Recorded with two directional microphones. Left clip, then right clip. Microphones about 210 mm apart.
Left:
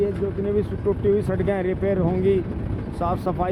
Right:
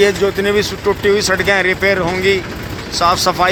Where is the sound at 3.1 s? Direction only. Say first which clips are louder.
Right 11 dB; 30° right (ahead or behind).